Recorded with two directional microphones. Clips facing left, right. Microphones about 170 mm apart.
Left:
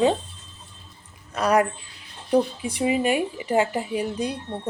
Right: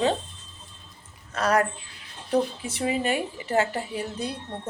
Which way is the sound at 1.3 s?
15° left (ahead or behind).